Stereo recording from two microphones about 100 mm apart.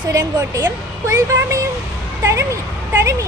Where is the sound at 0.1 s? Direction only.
40° right (ahead or behind).